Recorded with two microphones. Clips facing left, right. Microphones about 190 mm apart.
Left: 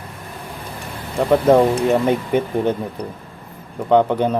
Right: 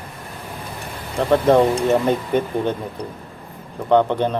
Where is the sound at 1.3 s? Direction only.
10° left (ahead or behind).